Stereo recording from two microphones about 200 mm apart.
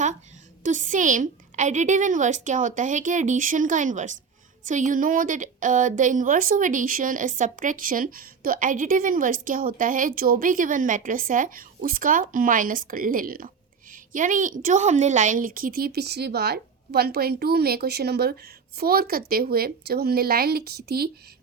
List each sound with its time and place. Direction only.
0.6 s a woman's voice: 40° right (ahead or behind)